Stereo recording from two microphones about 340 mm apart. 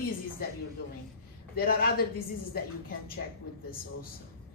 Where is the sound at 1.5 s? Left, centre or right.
Left.